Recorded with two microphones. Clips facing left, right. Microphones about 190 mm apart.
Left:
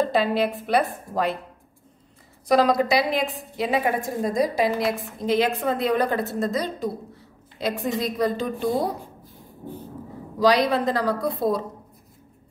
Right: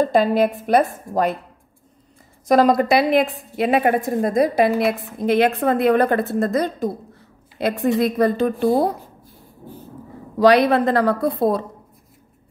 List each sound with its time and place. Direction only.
0.0 s a woman's voice: 45° right (ahead or behind)
2.4 s a woman's voice: 50° right (ahead or behind)
10.4 s a woman's voice: 60° right (ahead or behind)